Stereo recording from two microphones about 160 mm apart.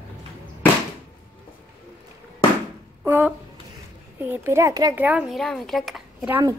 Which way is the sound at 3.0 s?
10° right (ahead or behind).